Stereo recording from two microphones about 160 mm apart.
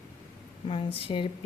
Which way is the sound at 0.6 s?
35° left (ahead or behind).